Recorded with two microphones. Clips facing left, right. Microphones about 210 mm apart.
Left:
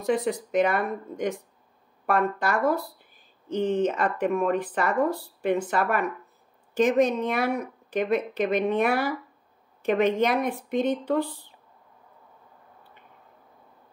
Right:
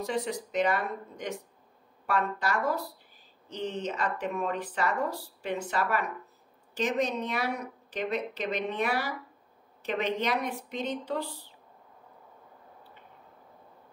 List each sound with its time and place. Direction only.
0.0 s speech: 50° left (ahead or behind)